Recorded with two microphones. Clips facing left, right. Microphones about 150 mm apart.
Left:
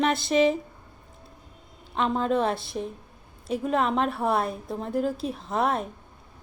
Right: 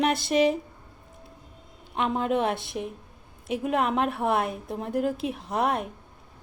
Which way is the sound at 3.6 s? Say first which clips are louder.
Even; 10° right (ahead or behind).